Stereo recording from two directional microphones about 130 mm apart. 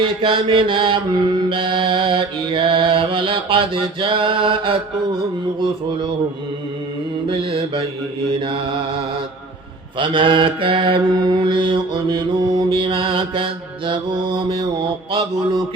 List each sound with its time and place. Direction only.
0.0 s mantra: 40° right (ahead or behind)
7.3 s mantra: 45° right (ahead or behind)
10.0 s mantra: 40° right (ahead or behind)